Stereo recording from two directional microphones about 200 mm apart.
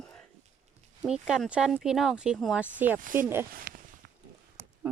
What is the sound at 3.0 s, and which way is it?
Speech, 40° right (ahead or behind).